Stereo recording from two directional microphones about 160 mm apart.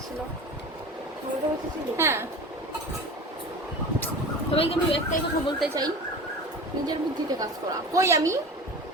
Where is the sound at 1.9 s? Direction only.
15° right (ahead or behind).